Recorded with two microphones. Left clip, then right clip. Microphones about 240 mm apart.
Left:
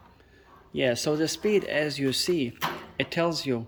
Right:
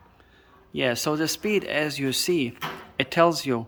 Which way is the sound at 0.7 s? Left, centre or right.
Centre.